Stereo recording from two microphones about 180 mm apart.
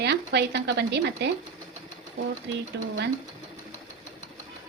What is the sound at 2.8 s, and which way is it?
Speech, 90° right.